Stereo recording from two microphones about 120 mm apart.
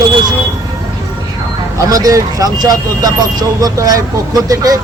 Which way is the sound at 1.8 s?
30° right (ahead or behind).